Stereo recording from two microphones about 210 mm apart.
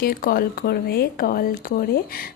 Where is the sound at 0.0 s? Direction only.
45° left (ahead or behind).